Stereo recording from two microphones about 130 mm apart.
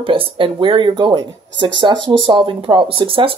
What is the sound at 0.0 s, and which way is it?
Speech, 45° right (ahead or behind).